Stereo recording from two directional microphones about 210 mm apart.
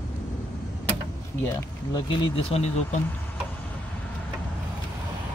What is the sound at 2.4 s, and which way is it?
Speech, 30° left (ahead or behind).